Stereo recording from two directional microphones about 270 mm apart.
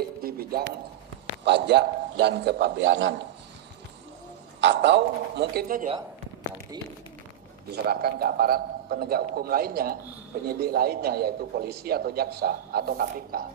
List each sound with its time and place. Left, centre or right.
0.2 s a sound: right
1.4 s a man's voice: right
4.6 s a man's voice: right
7.7 s a man's voice: right